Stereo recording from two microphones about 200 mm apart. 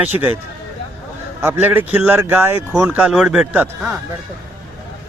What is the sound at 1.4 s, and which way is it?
Speech, 10° right (ahead or behind).